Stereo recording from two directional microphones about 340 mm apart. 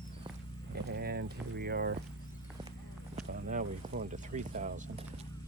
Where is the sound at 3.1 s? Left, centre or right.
Right.